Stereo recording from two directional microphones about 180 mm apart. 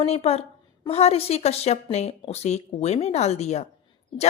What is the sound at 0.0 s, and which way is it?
A woman's voice, 35° left (ahead or behind).